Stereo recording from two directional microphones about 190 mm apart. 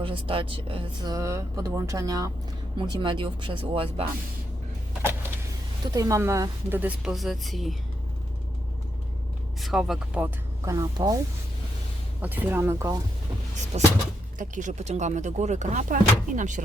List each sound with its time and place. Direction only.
0.0 s speech: 30° right (ahead or behind)
5.8 s speech: 20° right (ahead or behind); by 7.8 s centre (ahead or behind)
9.6 s speech: centre (ahead or behind)
10.7 s speech: 20° right (ahead or behind)
12.2 s speech: 10° right (ahead or behind)
13.7 s speech: 35° right (ahead or behind)